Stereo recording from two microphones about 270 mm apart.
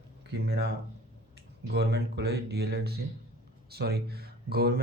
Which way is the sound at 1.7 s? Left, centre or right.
Right.